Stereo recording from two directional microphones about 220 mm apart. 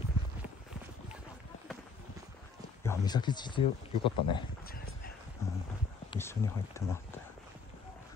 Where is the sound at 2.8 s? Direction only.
15° left (ahead or behind).